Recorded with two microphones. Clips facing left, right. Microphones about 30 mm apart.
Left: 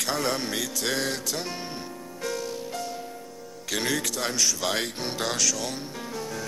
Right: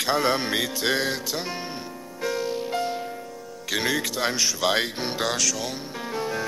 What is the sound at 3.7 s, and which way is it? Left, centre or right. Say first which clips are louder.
Music: right 3 dB; centre.